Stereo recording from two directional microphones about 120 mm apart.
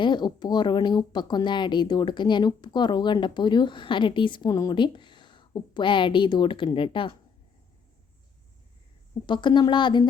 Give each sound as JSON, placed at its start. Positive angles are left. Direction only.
{"t": 0.0, "sound": "a woman's voice", "side_deg": 40}
{"t": 9.2, "sound": "a woman's voice", "side_deg": 40}